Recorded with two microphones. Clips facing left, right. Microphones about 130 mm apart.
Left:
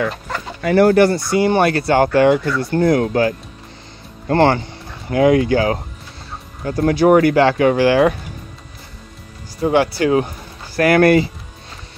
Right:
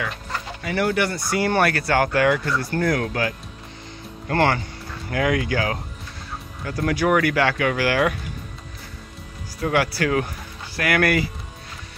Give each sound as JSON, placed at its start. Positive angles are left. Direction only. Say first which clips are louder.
{"t": 0.7, "sound": "speech", "louder": "left 11 dB", "side_deg": 40}
{"t": 1.3, "sound": "speech", "louder": "left 6 dB", "side_deg": 20}
{"t": 9.6, "sound": "speech", "louder": "left 6 dB", "side_deg": 25}